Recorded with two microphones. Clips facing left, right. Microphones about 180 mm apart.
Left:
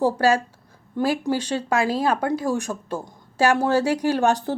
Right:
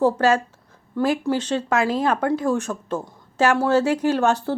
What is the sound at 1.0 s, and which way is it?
Speech, 35° left (ahead or behind).